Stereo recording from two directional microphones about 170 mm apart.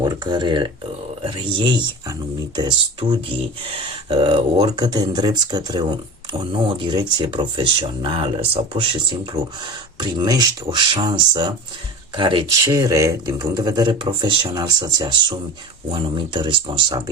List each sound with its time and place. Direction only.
0.0 s speech: 25° right (ahead or behind)